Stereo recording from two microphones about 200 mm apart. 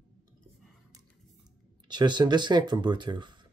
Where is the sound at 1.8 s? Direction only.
20° right (ahead or behind).